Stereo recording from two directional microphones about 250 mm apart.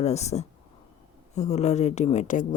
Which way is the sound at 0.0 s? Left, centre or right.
Left.